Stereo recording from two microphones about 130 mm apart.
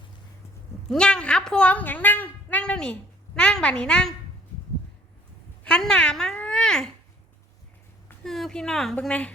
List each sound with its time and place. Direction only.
0.9 s a woman's voice: 5° left (ahead or behind)
5.6 s a child's voice: 5° left (ahead or behind)
8.2 s a woman's voice: 5° left (ahead or behind)